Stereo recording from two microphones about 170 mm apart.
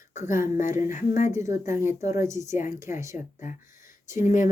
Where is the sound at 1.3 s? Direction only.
15° right (ahead or behind).